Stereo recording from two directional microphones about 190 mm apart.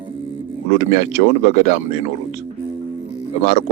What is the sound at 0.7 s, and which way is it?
Speech, 40° left (ahead or behind).